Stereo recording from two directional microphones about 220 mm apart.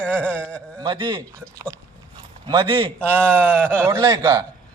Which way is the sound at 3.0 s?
5° left (ahead or behind).